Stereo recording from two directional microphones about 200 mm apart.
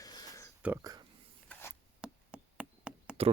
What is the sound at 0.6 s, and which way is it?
Speech, 10° right (ahead or behind).